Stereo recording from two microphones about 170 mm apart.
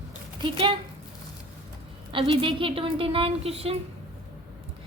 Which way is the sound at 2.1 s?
30° right (ahead or behind).